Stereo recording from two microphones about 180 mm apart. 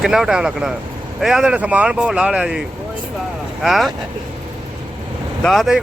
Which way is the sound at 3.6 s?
Centre (ahead or behind).